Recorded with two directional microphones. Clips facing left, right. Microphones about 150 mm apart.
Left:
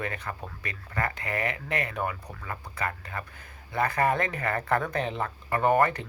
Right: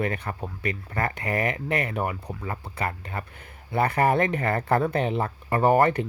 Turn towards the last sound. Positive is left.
turn(degrees=-35)  # may be behind; listen again after turning